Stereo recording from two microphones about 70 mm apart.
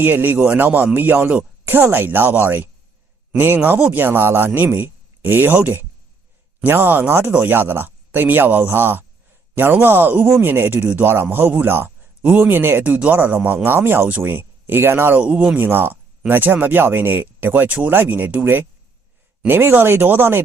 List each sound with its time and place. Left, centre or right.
0.0 s speech: right
12.2 s speech: centre
12.5 s speech: right
12.8 s speech: centre
15.2 s speech: centre
15.6 s speech: right